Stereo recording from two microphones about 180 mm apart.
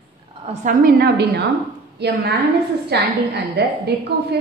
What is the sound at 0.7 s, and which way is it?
A woman's voice, 55° right (ahead or behind).